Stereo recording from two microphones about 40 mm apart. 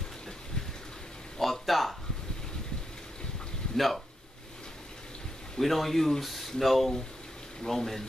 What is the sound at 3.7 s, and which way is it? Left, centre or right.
Speech, centre.